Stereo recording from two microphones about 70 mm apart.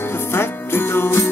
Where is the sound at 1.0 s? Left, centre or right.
Left.